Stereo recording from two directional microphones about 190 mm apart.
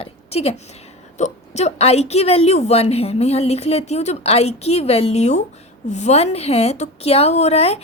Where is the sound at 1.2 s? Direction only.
35° left (ahead or behind).